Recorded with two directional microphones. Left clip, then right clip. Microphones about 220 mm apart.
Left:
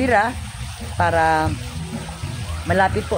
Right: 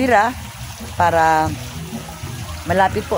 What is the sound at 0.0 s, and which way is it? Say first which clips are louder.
Speech: right 3 dB; 20° right (ahead or behind).